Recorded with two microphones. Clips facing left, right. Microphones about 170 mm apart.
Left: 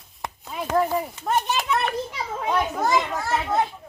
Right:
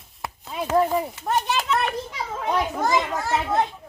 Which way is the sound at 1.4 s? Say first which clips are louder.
Right 1 dB; 15° left (ahead or behind).